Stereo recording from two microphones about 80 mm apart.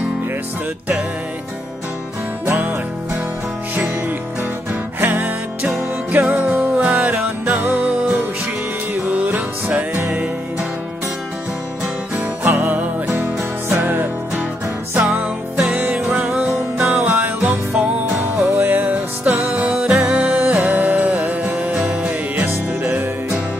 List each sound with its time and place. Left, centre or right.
2.4 s music: right
5.0 s music: right
12.2 s music: right
15.7 s music: centre
16.8 s music: right
19.7 s music: centre